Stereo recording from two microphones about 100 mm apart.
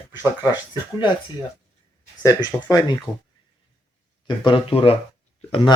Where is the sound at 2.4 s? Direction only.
45° left (ahead or behind).